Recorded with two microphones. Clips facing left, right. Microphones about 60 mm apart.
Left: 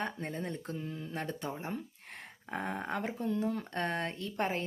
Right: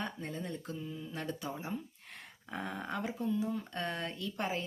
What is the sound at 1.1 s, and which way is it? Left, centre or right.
Speech, left.